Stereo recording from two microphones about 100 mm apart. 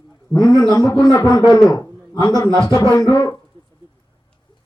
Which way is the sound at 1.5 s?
40° left (ahead or behind).